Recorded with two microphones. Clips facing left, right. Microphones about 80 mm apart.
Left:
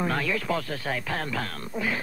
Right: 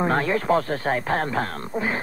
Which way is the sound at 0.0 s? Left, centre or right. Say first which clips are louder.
Right 6 dB; right.